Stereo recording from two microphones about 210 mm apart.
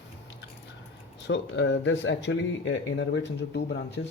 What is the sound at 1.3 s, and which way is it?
Speech, 60° left (ahead or behind).